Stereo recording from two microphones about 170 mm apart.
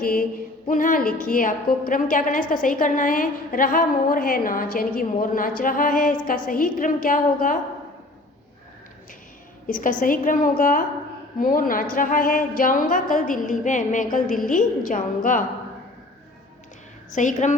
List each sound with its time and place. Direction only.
0.0 s a sound: 55° left (ahead or behind)
0.7 s a woman's voice: 50° left (ahead or behind)
9.6 s a woman's voice: 50° left (ahead or behind)
17.1 s a woman's voice: 45° left (ahead or behind)